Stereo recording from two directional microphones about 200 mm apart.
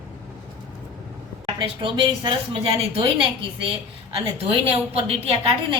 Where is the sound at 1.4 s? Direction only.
25° right (ahead or behind).